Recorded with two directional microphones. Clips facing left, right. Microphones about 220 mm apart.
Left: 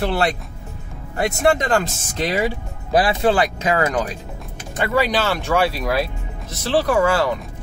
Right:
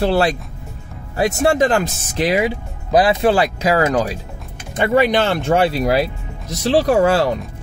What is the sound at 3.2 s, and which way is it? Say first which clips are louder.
Speech: right 2 dB; 35° right (ahead or behind).